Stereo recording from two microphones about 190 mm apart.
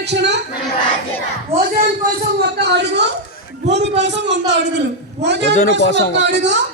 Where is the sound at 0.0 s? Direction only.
65° right (ahead or behind).